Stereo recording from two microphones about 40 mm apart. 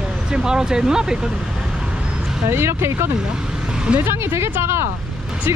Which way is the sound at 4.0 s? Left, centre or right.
Right.